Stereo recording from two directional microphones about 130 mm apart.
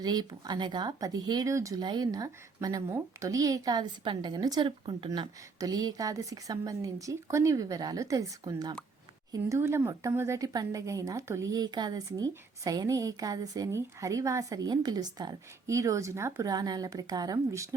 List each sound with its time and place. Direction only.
0.0 s speech: 30° right (ahead or behind)